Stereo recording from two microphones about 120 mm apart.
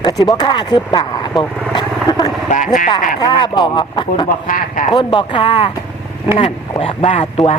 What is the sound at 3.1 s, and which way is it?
Speech, 40° left (ahead or behind).